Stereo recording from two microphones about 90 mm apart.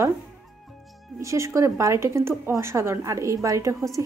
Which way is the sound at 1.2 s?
35° right (ahead or behind).